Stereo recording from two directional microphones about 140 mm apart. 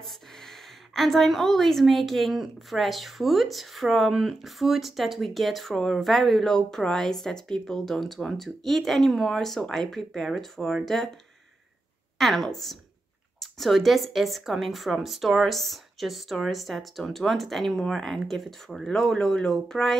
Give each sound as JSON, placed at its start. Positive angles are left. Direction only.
{"t": 0.0, "sound": "a woman's voice", "side_deg": 0}
{"t": 12.2, "sound": "a woman's voice", "side_deg": 0}